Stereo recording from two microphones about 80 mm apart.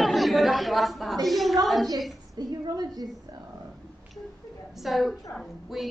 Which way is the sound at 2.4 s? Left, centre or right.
Right.